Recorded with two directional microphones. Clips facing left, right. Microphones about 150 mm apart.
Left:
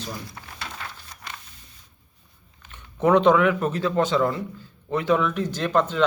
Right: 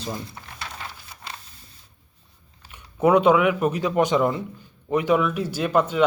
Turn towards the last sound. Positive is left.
turn(degrees=-10)  # may be behind; listen again after turning